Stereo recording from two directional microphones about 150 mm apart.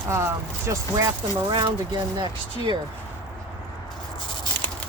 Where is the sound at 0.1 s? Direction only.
15° right (ahead or behind).